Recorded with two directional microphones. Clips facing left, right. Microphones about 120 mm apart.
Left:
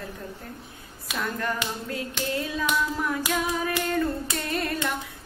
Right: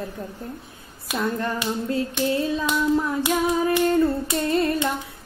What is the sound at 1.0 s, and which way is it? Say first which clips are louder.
Hands: right 4 dB; 25° right (ahead or behind).